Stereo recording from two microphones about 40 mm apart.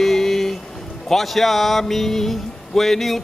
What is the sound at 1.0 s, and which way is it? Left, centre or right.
Speech, centre.